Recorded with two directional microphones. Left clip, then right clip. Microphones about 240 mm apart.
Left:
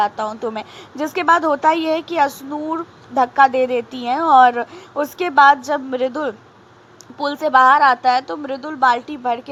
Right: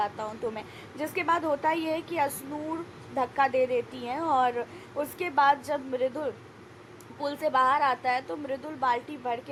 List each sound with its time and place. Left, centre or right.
0.0 s a woman's voice: left